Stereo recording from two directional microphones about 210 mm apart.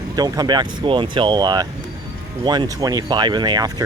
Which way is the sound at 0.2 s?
20° right (ahead or behind).